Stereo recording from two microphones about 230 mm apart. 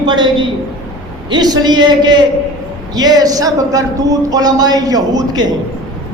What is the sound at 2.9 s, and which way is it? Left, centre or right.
A man's voice, centre.